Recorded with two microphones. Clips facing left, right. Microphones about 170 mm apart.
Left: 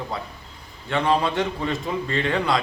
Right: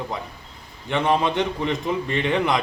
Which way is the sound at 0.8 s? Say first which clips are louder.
Right 1 dB; 20° right (ahead or behind).